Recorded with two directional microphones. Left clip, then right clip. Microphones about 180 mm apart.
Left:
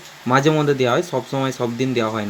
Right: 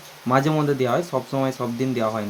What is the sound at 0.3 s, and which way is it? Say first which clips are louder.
Speech: left 4 dB; 5° left (ahead or behind).